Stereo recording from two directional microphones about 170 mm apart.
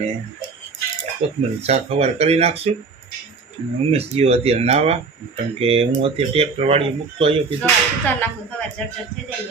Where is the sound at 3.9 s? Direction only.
35° right (ahead or behind).